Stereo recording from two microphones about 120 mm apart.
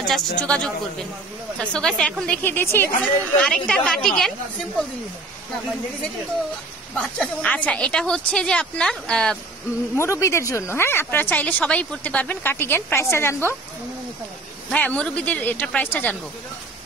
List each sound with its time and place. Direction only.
0.1 s a woman's voice: 10° left (ahead or behind)
1.6 s a woman's voice: 5° left (ahead or behind)
7.0 s a woman's voice: 10° left (ahead or behind)
9.9 s speech: 25° left (ahead or behind)
14.7 s a woman's voice: 10° left (ahead or behind)